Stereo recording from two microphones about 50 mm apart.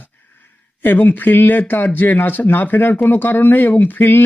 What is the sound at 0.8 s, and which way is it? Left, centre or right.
Speech, left.